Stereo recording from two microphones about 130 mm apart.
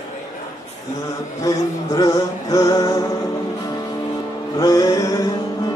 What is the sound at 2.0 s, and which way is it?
Music, 25° left (ahead or behind).